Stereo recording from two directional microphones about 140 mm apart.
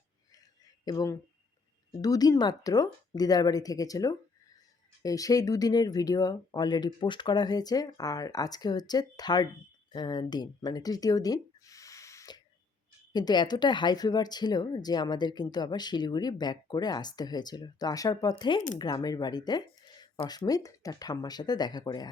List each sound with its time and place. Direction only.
0.9 s speech: 25° left (ahead or behind)